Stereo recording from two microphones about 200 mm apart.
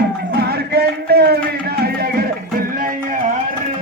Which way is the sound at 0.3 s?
55° right (ahead or behind).